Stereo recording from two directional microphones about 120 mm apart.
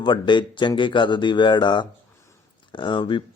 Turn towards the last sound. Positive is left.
turn(degrees=40)  # may be behind; listen again after turning